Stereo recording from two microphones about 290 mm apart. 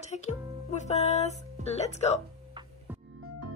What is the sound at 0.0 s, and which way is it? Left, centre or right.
Speech, left.